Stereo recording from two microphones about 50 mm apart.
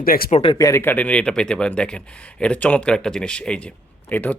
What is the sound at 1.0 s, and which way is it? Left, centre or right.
Speech, left.